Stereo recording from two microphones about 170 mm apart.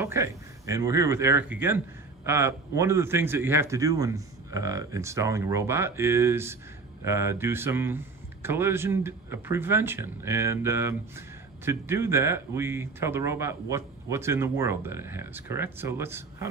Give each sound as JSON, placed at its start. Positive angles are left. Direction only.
{"t": 0.0, "sound": "a man's voice", "side_deg": -15}